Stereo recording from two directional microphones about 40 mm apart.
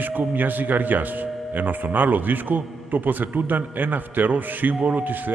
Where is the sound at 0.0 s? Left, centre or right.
Right.